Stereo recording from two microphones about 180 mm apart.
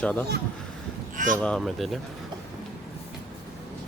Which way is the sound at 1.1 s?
45° right (ahead or behind).